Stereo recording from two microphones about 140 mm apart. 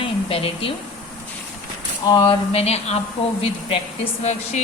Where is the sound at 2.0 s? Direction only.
35° left (ahead or behind).